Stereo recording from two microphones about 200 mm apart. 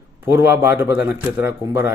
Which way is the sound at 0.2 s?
10° right (ahead or behind).